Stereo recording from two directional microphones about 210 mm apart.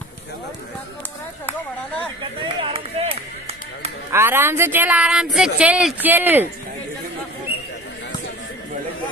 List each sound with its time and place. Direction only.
2.4 s run: 25° right (ahead or behind)
4.1 s speech: 10° right (ahead or behind)